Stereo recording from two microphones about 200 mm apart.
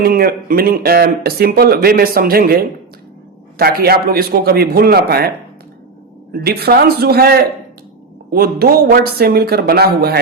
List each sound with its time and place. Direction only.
0.0 s speech: 50° right (ahead or behind)
6.3 s speech: 50° right (ahead or behind)